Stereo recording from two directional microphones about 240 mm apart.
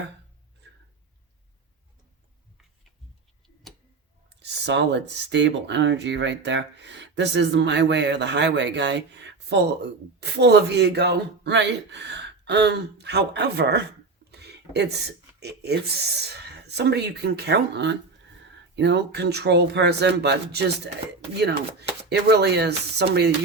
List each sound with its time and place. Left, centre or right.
4.4 s speech: right
14.3 s a sound: right
15.4 s speech: right